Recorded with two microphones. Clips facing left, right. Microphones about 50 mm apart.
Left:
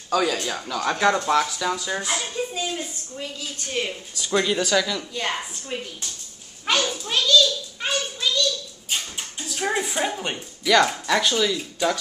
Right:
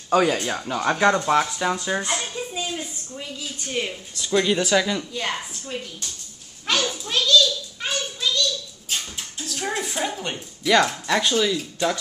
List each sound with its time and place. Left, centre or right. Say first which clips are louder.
0.1 s speech: right 3 dB; right
0.7 s speech: right 1 dB; centre
2.0 s speech: left 1 dB; centre
4.6 s speech: right 1 dB; centre
5.1 s speech: even; centre
6.6 s children playing: left 1 dB; centre
7.4 s a sound: left 1 dB; centre
10.6 s speech: even; centre